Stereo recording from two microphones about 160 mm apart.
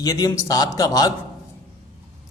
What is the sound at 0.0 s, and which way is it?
A man's voice, 25° left (ahead or behind).